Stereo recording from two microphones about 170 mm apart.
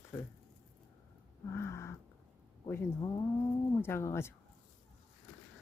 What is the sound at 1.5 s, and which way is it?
Speech, 15° left (ahead or behind).